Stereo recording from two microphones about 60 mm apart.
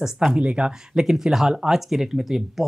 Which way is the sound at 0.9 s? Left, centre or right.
Centre.